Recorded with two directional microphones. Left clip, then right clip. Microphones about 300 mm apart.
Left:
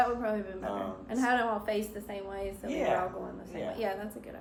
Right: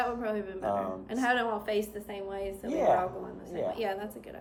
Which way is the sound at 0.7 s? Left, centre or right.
Right.